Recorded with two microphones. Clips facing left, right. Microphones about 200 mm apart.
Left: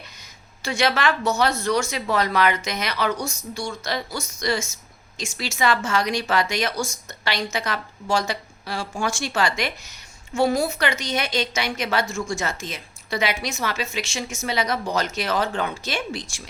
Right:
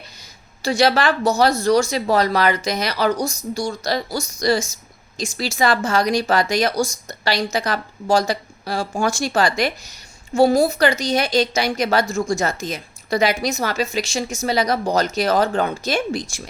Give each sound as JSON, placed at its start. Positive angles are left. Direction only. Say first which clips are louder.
{"t": 0.6, "sound": "a woman's voice", "louder": "right 5 dB", "side_deg": -35}